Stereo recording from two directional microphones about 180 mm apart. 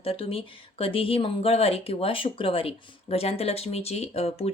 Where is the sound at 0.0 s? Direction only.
30° left (ahead or behind).